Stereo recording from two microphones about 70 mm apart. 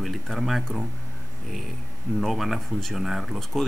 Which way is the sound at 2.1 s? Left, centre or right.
Centre.